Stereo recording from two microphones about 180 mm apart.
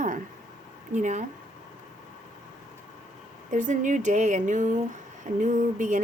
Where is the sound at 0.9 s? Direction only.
40° right (ahead or behind).